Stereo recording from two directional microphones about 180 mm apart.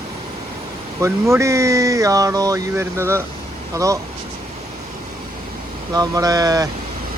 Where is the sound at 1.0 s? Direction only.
15° right (ahead or behind).